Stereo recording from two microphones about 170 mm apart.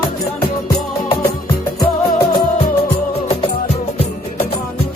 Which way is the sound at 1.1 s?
30° left (ahead or behind).